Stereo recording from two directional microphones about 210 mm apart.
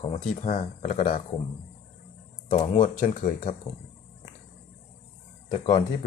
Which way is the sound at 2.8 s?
40° left (ahead or behind).